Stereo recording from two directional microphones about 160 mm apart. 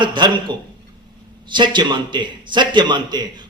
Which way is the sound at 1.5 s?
30° right (ahead or behind).